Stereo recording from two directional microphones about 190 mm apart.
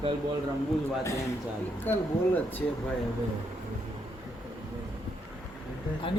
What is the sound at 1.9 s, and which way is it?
Speech, 10° left (ahead or behind).